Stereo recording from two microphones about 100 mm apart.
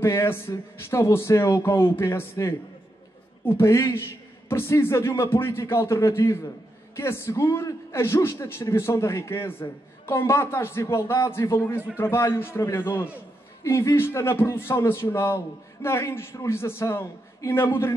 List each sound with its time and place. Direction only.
0.0 s a man's voice: 25° left (ahead or behind)